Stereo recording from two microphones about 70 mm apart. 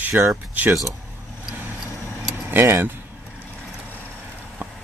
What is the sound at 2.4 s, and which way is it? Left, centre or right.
Speech, right.